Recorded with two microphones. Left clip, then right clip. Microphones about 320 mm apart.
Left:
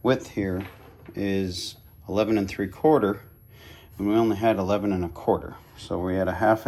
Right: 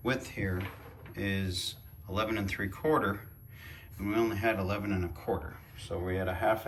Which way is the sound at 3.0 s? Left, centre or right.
Centre.